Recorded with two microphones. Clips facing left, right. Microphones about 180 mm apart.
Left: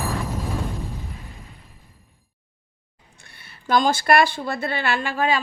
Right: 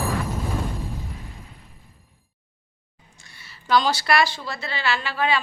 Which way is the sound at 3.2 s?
55° left (ahead or behind).